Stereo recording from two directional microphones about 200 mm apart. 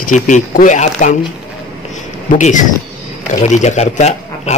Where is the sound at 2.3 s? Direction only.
40° left (ahead or behind).